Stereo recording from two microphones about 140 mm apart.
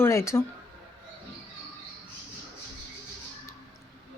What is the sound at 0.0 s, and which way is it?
Speech, 20° left (ahead or behind).